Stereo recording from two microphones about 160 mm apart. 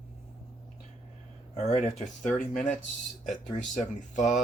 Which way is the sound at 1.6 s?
45° left (ahead or behind).